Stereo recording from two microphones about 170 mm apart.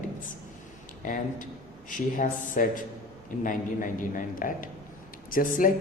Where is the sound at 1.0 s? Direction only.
50° left (ahead or behind).